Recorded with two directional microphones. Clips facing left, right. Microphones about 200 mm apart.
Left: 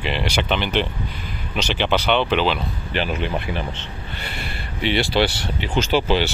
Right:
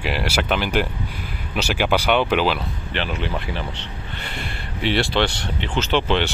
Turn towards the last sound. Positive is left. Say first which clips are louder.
# left 1 dB
turn(degrees=5)  # may be behind; listen again after turning